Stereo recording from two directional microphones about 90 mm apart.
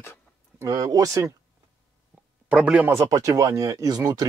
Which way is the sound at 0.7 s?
45° right (ahead or behind).